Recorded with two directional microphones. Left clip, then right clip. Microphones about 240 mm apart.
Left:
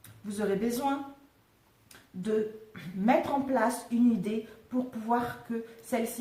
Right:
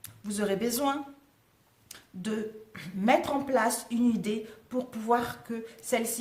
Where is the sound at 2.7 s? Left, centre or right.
Right.